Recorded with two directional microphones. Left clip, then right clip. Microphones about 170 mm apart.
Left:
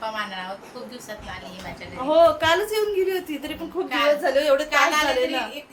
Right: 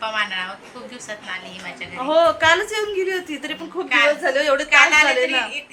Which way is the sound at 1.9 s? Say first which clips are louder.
Even; centre (ahead or behind).